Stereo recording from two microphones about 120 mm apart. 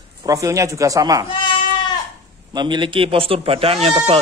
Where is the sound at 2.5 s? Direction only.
40° right (ahead or behind).